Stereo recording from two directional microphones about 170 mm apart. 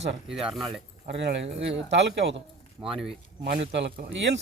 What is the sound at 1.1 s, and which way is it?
A man's voice, 85° right.